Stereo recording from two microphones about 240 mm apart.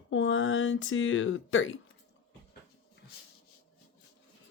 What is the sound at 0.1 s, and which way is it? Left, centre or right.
A woman's voice, left.